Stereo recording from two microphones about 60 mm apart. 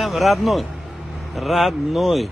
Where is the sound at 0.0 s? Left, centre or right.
Centre.